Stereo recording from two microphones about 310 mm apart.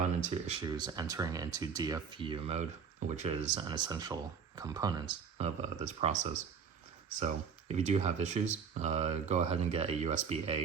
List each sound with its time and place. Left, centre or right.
0.2 s speech: centre
7.7 s speech: right